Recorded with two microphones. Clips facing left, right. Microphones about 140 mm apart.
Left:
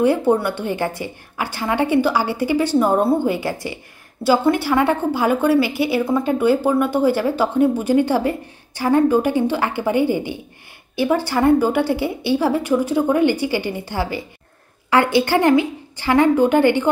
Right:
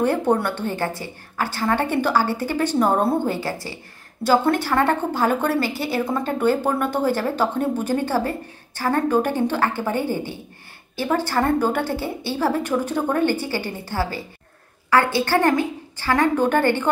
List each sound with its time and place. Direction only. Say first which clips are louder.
0.0 s speech: left 3 dB; 10° left (ahead or behind)